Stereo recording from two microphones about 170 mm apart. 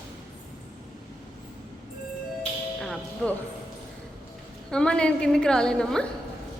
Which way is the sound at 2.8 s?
Centre (ahead or behind).